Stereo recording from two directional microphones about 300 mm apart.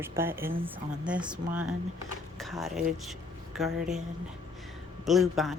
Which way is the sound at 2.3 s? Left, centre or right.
Centre.